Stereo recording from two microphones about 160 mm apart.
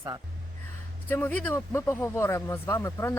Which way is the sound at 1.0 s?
15° left (ahead or behind).